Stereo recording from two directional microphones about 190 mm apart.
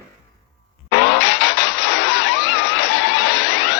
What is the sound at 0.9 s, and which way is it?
Vehicle, 65° left (ahead or behind).